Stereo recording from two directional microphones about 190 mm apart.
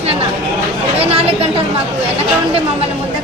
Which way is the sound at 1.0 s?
30° right (ahead or behind).